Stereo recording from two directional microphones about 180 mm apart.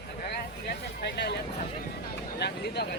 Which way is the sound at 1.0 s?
65° left (ahead or behind).